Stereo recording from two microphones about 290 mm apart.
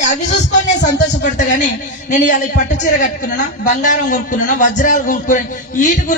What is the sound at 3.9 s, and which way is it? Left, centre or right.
A man's voice, left.